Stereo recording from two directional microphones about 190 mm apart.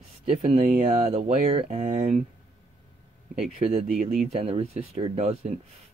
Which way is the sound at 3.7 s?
30° right (ahead or behind).